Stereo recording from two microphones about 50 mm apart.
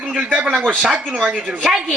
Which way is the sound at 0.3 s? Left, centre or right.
Right.